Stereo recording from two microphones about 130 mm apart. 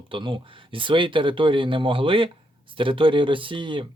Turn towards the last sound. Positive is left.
turn(degrees=-40)  # may be behind; listen again after turning